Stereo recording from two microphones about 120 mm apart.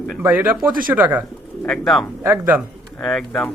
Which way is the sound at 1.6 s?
5° left (ahead or behind).